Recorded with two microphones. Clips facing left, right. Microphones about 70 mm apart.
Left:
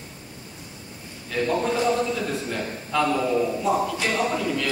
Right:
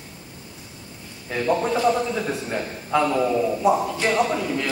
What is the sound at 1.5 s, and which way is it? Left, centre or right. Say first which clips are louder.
A man's voice: right 3 dB; centre.